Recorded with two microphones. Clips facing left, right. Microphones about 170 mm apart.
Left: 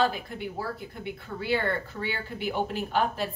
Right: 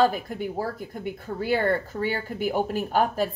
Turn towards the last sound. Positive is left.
turn(degrees=-45)  # may be behind; listen again after turning